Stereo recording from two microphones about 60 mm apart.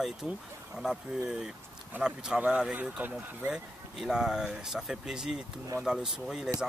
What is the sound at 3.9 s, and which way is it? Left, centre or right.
Speech, centre.